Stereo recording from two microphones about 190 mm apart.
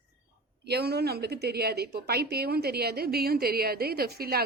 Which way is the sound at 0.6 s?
60° right (ahead or behind).